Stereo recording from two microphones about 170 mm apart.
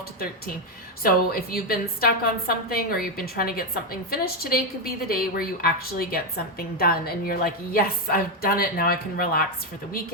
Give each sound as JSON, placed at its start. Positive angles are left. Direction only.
{"t": 1.0, "sound": "a woman's voice", "side_deg": 60}